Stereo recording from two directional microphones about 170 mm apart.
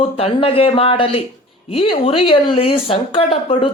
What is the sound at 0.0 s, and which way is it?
A man's voice, 35° left (ahead or behind).